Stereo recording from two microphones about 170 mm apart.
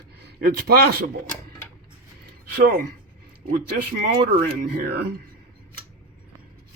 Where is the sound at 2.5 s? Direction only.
60° right (ahead or behind).